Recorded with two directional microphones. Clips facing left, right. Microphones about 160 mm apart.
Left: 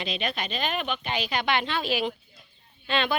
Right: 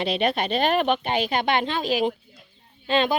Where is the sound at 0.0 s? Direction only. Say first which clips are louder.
Right 8 dB; 60° right (ahead or behind).